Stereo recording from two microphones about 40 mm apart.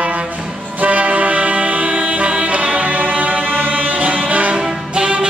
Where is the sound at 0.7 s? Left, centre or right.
Right.